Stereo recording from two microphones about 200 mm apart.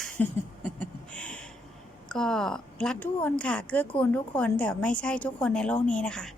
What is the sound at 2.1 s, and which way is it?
A woman's voice, 5° left (ahead or behind).